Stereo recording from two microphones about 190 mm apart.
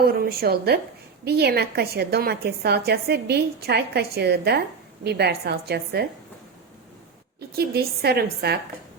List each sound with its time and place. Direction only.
0.0 s a woman's voice: 55° right (ahead or behind)
7.3 s a woman's voice: 55° right (ahead or behind)